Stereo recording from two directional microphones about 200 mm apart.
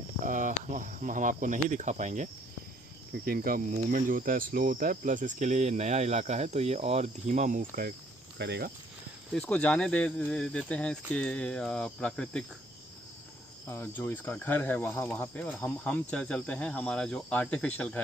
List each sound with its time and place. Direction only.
0.2 s speech: 40° right (ahead or behind)
3.3 s speech: 45° right (ahead or behind)
8.4 s speech: 55° right (ahead or behind)
9.3 s speech: 5° left (ahead or behind)
13.7 s speech: 10° left (ahead or behind)